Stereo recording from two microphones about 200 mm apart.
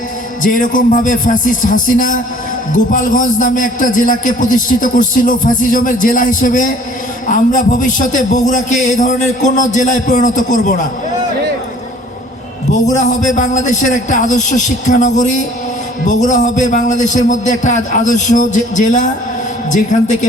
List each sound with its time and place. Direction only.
0.4 s a man's voice: 40° left (ahead or behind)
12.7 s a man's voice: 35° left (ahead or behind)